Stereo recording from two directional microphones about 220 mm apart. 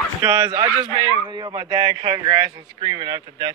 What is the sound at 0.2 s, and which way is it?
A man's voice, 15° right (ahead or behind).